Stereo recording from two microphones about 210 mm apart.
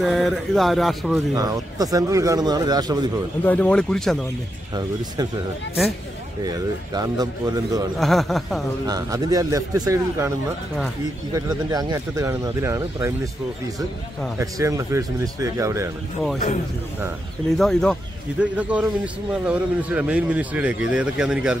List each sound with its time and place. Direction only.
0.0 s speech: centre (ahead or behind)
1.3 s speech: 15° right (ahead or behind)
3.4 s speech: 5° left (ahead or behind)
4.7 s speech: 20° right (ahead or behind)
6.4 s speech: 20° right (ahead or behind)
8.0 s speech: centre (ahead or behind)
8.8 s speech: 15° right (ahead or behind)
11.3 s speech: 15° right (ahead or behind)
14.4 s speech: 15° right (ahead or behind)
17.6 s speech: centre (ahead or behind)